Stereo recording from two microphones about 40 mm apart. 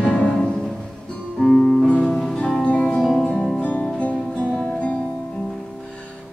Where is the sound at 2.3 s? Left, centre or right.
Centre.